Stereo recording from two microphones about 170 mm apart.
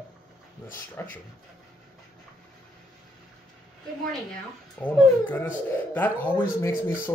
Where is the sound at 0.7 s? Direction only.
10° left (ahead or behind).